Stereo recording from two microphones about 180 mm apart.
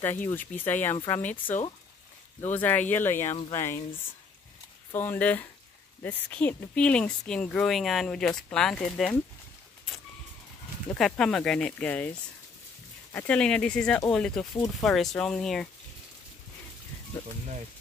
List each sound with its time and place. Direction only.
0.3 s speech: 10° left (ahead or behind)
4.9 s speech: 10° left (ahead or behind)
11.0 s speech: centre (ahead or behind)
13.1 s speech: 5° left (ahead or behind)